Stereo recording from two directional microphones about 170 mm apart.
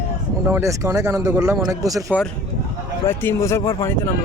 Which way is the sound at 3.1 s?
15° left (ahead or behind).